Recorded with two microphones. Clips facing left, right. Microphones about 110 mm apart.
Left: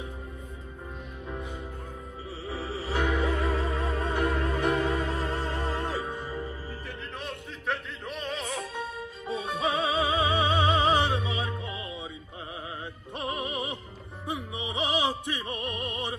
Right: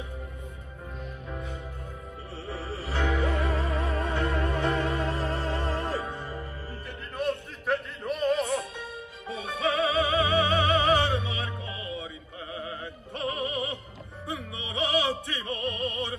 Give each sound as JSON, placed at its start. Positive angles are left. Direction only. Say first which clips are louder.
{"t": 2.4, "sound": "music", "louder": "left 2 dB", "side_deg": 0}
{"t": 9.3, "sound": "music", "louder": "even", "side_deg": 25}
{"t": 12.5, "sound": "opera", "louder": "right 3 dB", "side_deg": 20}
{"t": 14.2, "sound": "music", "louder": "left 2 dB", "side_deg": 20}